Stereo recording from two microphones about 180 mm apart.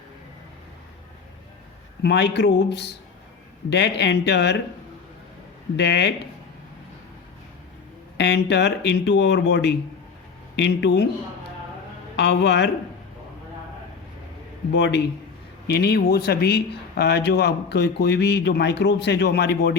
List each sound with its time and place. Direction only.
2.0 s speech: 70° left (ahead or behind)
5.7 s speech: 75° left (ahead or behind)
8.2 s speech: 75° left (ahead or behind)
12.1 s speech: 70° left (ahead or behind)
14.7 s speech: 75° left (ahead or behind)